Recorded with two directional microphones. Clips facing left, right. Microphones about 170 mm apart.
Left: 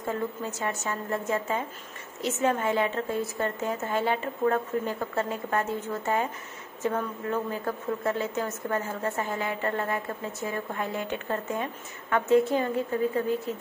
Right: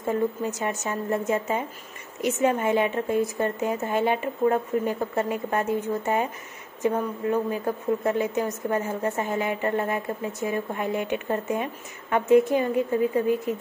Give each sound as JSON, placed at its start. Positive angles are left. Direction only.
{"t": 0.0, "sound": "a woman's voice", "side_deg": -20}